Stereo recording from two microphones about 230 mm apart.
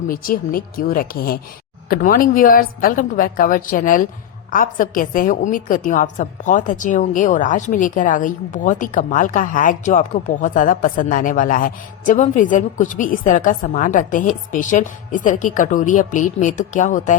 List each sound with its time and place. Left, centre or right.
0.1 s a woman's voice: left